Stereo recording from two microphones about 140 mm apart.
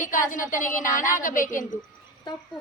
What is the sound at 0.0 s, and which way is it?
Speech, 70° left (ahead or behind).